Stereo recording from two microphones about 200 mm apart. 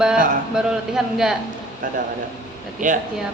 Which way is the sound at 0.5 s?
5° right (ahead or behind).